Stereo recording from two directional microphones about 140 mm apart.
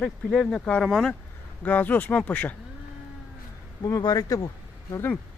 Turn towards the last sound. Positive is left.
turn(degrees=20)  # may be behind; listen again after turning